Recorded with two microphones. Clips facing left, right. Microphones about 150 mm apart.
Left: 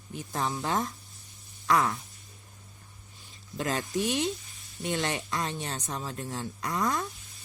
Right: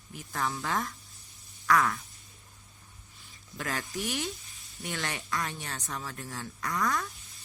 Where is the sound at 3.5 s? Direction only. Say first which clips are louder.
Left 6 dB; 25° left (ahead or behind).